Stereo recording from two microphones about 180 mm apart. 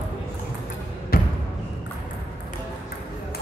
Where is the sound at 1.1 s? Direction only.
55° left (ahead or behind).